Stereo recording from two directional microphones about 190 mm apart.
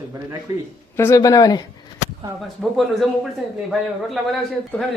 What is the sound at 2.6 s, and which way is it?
Speech, centre (ahead or behind).